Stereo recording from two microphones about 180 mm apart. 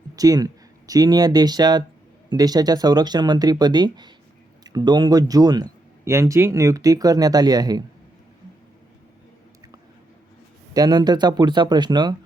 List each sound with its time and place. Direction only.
0.2 s speech: 20° right (ahead or behind)
10.8 s speech: 20° right (ahead or behind)